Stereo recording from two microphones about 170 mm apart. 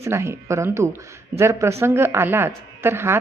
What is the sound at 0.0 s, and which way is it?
Speech, 15° right (ahead or behind).